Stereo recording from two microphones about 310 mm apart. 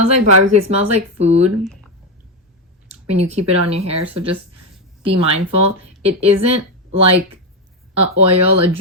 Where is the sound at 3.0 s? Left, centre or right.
Centre.